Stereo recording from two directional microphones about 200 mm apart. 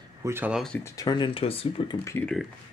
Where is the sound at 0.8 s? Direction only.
20° left (ahead or behind).